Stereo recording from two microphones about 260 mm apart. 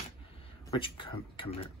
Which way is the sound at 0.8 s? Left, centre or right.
Centre.